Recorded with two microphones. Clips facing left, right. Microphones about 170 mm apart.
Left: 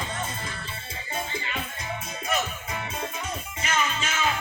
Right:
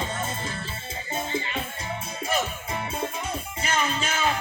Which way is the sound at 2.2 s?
30° right (ahead or behind).